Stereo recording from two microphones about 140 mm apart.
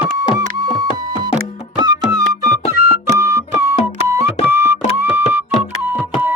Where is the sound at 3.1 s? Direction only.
20° right (ahead or behind).